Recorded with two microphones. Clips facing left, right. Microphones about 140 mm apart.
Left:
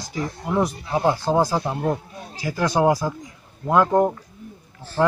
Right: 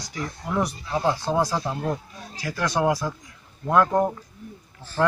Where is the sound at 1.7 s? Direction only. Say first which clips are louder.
Left 4 dB; 25° left (ahead or behind).